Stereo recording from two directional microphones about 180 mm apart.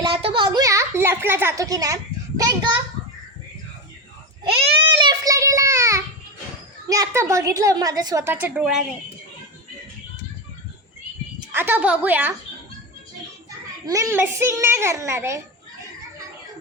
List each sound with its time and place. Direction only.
0.0 s a sound: 30° right (ahead or behind)
2.4 s a child's voice: 20° right (ahead or behind)
4.9 s child singing: 20° right (ahead or behind)
6.8 s a woman's voice: 20° right (ahead or behind)
11.5 s a woman's voice: 10° right (ahead or behind)
13.8 s a woman's voice: 15° right (ahead or behind)